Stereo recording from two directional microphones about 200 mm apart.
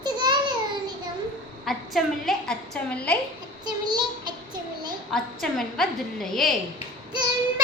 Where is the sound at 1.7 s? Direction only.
Centre (ahead or behind).